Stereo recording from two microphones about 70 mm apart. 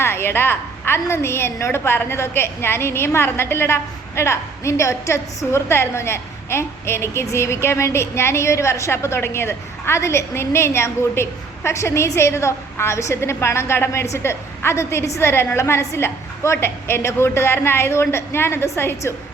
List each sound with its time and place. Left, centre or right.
0.0 s a woman's voice: left